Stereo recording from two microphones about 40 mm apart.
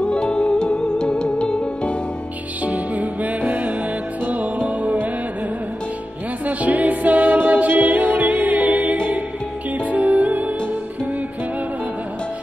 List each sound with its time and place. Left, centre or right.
0.0 s music: left
2.6 s music: right
6.4 s a capella: right
8.9 s music: right
9.8 s music: right